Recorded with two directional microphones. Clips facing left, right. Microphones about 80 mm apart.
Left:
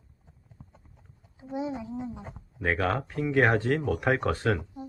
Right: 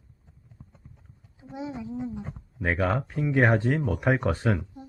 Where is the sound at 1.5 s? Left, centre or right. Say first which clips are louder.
Left 2 dB; centre.